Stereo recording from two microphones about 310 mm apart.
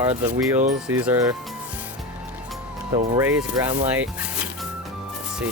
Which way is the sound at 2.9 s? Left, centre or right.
Centre.